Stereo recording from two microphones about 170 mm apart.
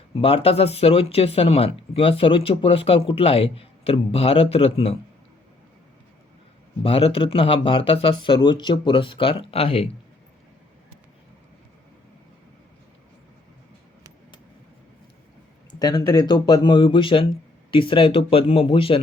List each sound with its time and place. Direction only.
0.2 s speech: 35° left (ahead or behind)
6.8 s speech: 35° left (ahead or behind)
15.8 s speech: 25° left (ahead or behind)